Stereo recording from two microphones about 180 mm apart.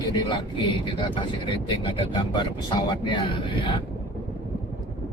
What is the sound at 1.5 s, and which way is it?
Speech, 25° left (ahead or behind).